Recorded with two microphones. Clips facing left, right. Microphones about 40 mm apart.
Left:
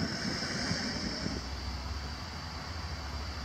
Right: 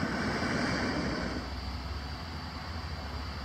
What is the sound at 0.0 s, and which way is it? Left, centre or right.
Vehicle, right.